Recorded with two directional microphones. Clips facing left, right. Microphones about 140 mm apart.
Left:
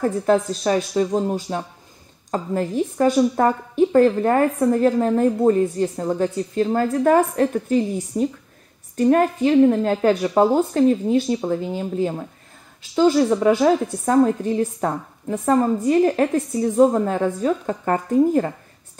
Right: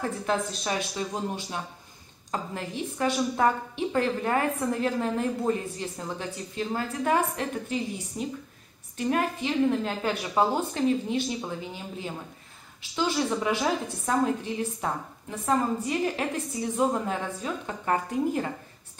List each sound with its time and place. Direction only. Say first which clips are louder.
0.0 s a woman's voice: left 10 dB; 40° left (ahead or behind)